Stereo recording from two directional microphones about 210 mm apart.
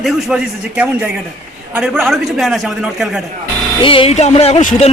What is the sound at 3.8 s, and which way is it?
Music, 25° left (ahead or behind).